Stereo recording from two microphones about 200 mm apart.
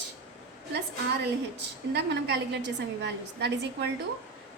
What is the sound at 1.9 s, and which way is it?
A woman's voice, 55° right (ahead or behind).